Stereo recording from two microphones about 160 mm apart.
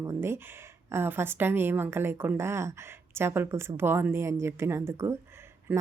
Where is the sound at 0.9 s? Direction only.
15° right (ahead or behind).